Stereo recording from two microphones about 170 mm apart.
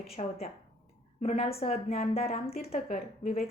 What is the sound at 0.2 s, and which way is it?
A woman's voice, 35° left (ahead or behind).